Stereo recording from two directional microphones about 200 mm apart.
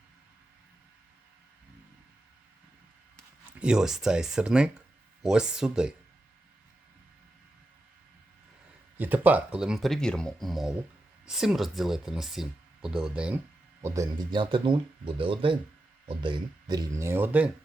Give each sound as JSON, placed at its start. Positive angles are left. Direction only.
{"t": 3.2, "sound": "speech", "side_deg": -5}
{"t": 9.0, "sound": "speech", "side_deg": -10}
{"t": 13.8, "sound": "speech", "side_deg": -15}